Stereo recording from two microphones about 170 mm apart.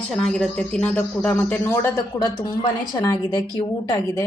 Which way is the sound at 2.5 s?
25° left (ahead or behind).